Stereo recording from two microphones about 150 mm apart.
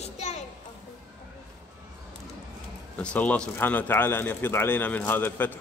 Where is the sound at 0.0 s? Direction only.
50° left (ahead or behind).